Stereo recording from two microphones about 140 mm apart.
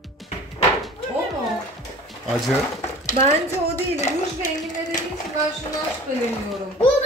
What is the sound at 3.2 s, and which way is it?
Speech, 55° right (ahead or behind).